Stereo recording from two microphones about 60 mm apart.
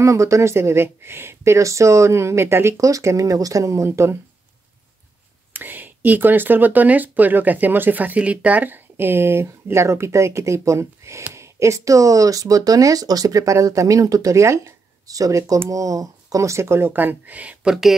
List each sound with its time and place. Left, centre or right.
0.0 s speech: right
2.8 s speech: right
5.5 s speech: right
15.0 s speech: right
16.9 s speech: right
17.6 s speech: centre